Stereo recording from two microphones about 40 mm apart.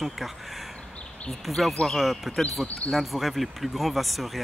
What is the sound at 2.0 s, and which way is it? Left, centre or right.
Speech, centre.